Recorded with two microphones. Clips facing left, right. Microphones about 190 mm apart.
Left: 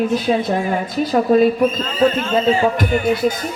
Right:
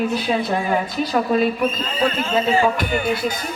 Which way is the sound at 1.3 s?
40° left (ahead or behind).